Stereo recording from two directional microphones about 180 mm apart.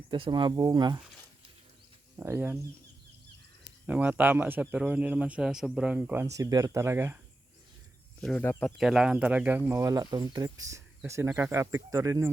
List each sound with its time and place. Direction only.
0.1 s speech: 25° right (ahead or behind)
2.1 s cricket: 15° right (ahead or behind)
3.8 s speech: 10° right (ahead or behind)
8.2 s speech: 10° left (ahead or behind)
8.8 s speech: centre (ahead or behind)